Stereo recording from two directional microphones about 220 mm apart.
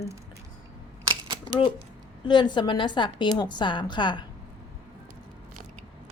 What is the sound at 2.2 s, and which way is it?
A woman's voice, 20° left (ahead or behind).